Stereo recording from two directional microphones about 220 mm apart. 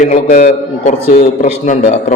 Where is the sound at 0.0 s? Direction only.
35° left (ahead or behind).